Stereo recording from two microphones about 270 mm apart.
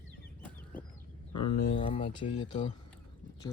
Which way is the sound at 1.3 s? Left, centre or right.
Left.